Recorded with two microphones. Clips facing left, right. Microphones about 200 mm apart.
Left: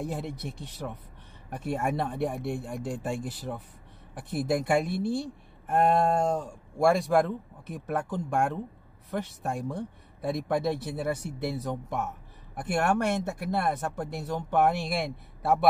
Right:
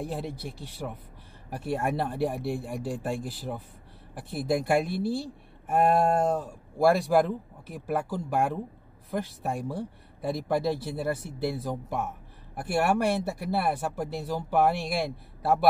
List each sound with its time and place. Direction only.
0.3 s speech: 30° right (ahead or behind)
1.7 s speech: 5° right (ahead or behind)